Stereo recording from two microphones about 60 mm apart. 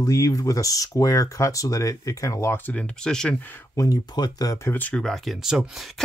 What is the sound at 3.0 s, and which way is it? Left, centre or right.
Speech, centre.